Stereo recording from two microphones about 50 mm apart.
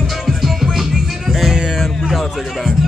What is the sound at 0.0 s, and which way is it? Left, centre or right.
Music, centre.